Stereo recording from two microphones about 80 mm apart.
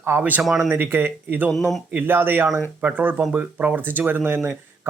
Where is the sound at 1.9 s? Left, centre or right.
Right.